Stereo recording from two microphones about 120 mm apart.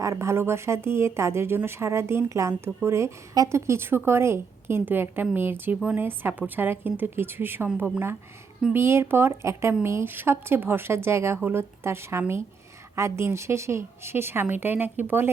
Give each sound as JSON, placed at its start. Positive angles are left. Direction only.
{"t": 0.0, "sound": "a woman's voice", "side_deg": -25}